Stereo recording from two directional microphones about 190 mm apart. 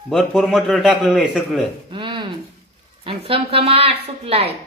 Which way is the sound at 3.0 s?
30° right (ahead or behind).